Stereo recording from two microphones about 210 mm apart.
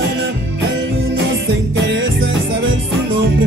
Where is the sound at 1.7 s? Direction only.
60° right (ahead or behind).